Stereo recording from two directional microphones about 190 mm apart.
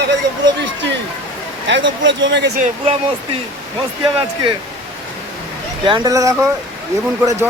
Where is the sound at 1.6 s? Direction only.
70° right (ahead or behind).